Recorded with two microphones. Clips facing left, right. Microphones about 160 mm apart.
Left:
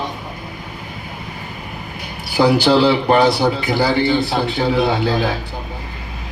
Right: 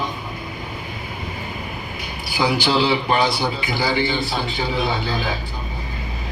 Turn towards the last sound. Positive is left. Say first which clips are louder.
# left 6 dB
turn(degrees=60)  # may be behind; listen again after turning